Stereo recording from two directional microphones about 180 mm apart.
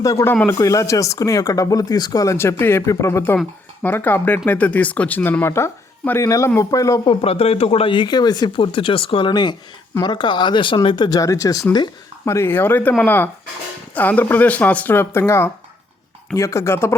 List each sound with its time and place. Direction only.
0.0 s speech: 20° left (ahead or behind)